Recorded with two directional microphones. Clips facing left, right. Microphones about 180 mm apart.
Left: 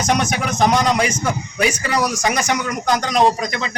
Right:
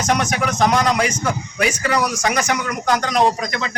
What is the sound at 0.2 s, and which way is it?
A man's voice, 25° left (ahead or behind).